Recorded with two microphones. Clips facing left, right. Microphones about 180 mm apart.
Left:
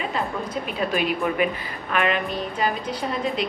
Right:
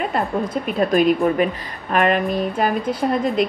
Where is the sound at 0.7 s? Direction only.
45° right (ahead or behind).